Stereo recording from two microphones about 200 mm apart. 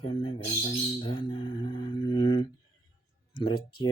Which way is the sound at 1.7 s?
20° left (ahead or behind).